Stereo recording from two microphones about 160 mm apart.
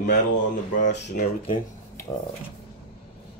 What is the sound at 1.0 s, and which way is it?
Speech, 70° left (ahead or behind).